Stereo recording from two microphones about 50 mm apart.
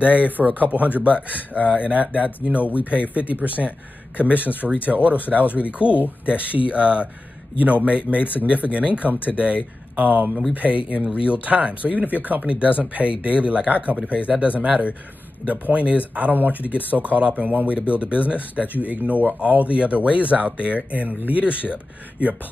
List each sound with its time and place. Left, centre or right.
0.0 s speech: right
4.4 s speech: left
4.8 s speech: right